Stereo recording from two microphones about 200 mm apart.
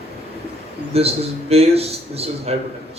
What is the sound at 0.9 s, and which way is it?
A man's voice, 30° right (ahead or behind).